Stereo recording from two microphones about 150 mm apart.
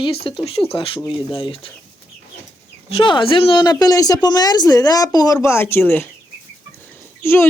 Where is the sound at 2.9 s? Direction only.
35° left (ahead or behind); by 6.1 s 15° left (ahead or behind).